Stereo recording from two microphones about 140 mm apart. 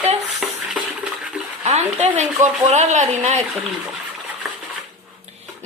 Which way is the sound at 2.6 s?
55° right (ahead or behind).